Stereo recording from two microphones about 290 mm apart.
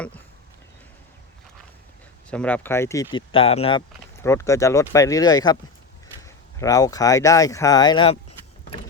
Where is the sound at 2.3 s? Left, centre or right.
Centre.